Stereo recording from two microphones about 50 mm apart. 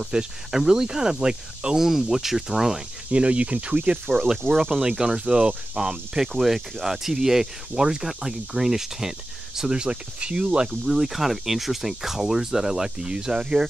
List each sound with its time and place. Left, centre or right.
0.0 s speech: centre
1.9 s speech: centre
3.1 s speech: right
4.5 s speech: centre